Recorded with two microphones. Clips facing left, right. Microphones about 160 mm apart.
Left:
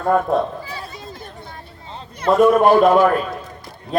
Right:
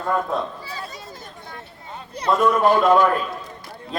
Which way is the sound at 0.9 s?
55° left (ahead or behind).